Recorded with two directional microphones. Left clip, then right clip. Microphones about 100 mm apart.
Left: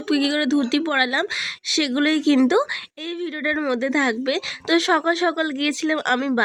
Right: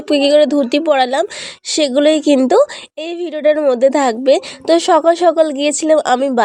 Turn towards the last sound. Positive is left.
turn(degrees=-35)  # may be behind; listen again after turning